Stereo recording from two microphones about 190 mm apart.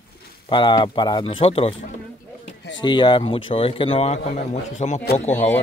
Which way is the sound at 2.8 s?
25° left (ahead or behind).